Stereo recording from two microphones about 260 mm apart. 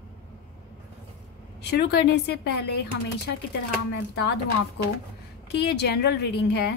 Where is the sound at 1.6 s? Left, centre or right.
Left.